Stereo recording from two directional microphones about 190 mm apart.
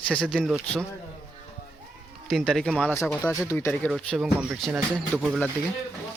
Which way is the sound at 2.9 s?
15° left (ahead or behind).